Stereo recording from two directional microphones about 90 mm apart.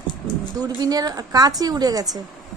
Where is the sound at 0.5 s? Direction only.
45° right (ahead or behind).